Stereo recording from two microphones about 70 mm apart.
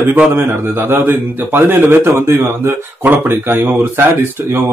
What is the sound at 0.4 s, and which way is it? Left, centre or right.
A man's voice, right.